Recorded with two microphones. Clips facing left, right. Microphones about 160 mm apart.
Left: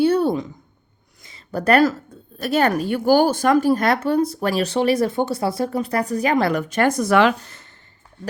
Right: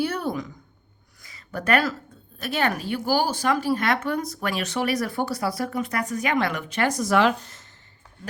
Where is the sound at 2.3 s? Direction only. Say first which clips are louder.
Left 7 dB; 40° left (ahead or behind); by 7.6 s 70° left (ahead or behind).